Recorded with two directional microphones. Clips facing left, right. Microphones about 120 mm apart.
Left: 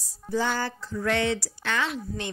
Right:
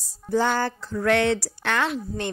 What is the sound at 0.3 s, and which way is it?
Speech, 55° right (ahead or behind).